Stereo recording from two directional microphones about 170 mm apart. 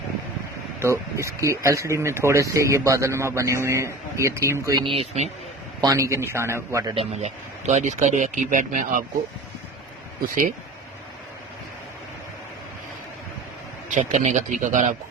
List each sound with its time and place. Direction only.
0.8 s speech: 15° right (ahead or behind); by 5.3 s 35° right (ahead or behind)
5.8 s speech: 20° right (ahead or behind)
6.9 s speech: 40° right (ahead or behind)
13.9 s speech: 45° right (ahead or behind)